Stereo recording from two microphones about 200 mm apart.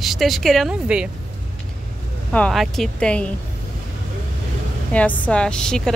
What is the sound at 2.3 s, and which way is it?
A woman's voice, 5° left (ahead or behind).